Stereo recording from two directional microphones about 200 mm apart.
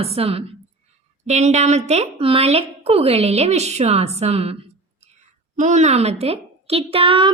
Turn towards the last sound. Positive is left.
turn(degrees=-25)  # may be behind; listen again after turning